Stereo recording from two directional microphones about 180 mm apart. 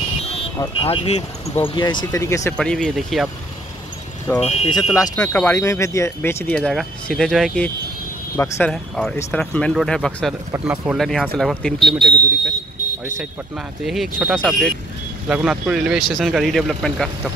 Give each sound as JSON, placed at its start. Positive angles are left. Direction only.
{"t": 0.2, "sound": "vehicle", "side_deg": 35}
{"t": 0.6, "sound": "speech", "side_deg": 30}
{"t": 1.8, "sound": "speech", "side_deg": 25}
{"t": 2.5, "sound": "speech", "side_deg": 5}
{"t": 4.4, "sound": "speech", "side_deg": 35}
{"t": 5.1, "sound": "speech", "side_deg": 5}
{"t": 13.8, "sound": "speech", "side_deg": 0}